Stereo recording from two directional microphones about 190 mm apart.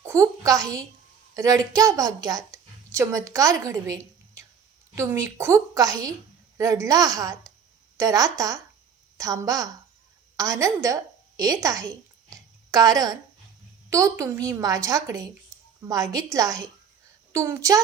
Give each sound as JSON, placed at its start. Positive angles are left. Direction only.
{"t": 0.0, "sound": "a woman's voice", "side_deg": -15}